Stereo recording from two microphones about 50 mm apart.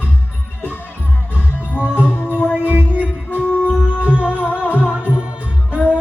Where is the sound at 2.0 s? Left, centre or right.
Left.